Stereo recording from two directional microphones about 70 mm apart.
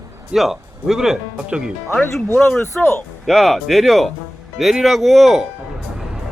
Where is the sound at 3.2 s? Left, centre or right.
Centre.